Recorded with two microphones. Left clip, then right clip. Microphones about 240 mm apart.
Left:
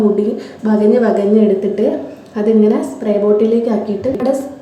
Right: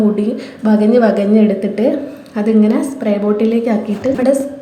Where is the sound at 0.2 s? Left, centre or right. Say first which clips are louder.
Left 2 dB; centre.